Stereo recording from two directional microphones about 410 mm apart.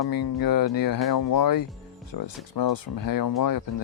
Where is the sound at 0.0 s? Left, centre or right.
Left.